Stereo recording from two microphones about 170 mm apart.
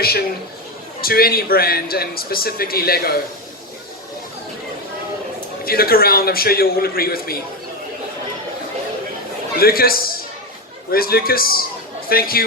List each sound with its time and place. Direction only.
1.0 s a man's voice: 60° left (ahead or behind)
5.6 s a man's voice: 60° left (ahead or behind)
9.6 s a man's voice: 60° left (ahead or behind)